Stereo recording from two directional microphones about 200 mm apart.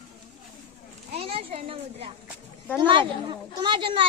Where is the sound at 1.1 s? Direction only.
30° right (ahead or behind).